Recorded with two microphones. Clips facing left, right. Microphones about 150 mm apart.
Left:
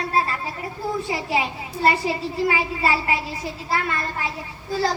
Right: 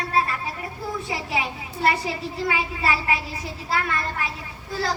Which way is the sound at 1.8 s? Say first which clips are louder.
Left 3 dB; 25° left (ahead or behind).